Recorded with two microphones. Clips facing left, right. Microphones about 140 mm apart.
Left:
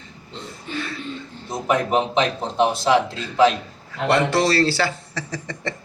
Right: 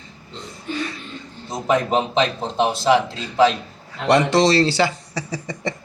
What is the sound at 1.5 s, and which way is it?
A man's voice, 20° right (ahead or behind).